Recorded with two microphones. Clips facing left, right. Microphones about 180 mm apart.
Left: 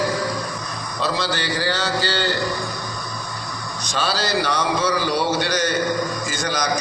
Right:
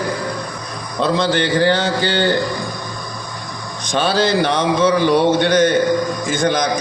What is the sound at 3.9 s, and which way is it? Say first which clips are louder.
A man's voice: right 7 dB; 55° right (ahead or behind).